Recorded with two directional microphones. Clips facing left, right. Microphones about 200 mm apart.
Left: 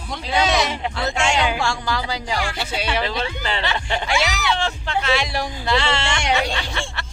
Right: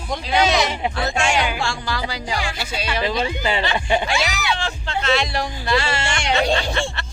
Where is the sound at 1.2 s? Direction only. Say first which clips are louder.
Left 1 dB; 20° left (ahead or behind).